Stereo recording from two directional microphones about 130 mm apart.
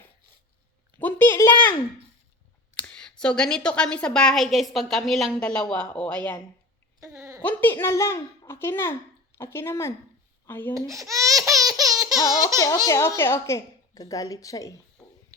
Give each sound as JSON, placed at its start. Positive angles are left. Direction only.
{"t": 0.9, "sound": "speech", "side_deg": 15}
{"t": 2.8, "sound": "a woman's voice", "side_deg": 10}
{"t": 7.0, "sound": "speech", "side_deg": -20}
{"t": 7.4, "sound": "a woman's voice", "side_deg": 15}
{"t": 10.8, "sound": "laughter", "side_deg": -25}
{"t": 12.5, "sound": "speech", "side_deg": 25}